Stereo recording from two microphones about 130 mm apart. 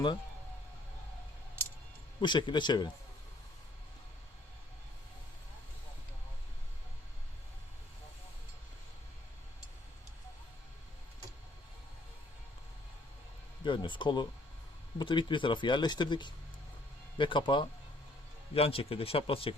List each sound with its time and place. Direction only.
2.2 s speech: 35° left (ahead or behind)
13.7 s speech: 40° left (ahead or behind)